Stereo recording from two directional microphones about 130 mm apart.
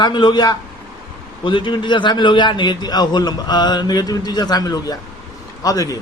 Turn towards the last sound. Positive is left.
turn(degrees=30)  # may be behind; listen again after turning